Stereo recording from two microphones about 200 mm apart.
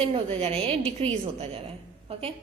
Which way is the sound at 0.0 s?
30° right (ahead or behind).